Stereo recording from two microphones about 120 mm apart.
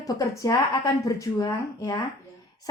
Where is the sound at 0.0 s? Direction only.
30° left (ahead or behind).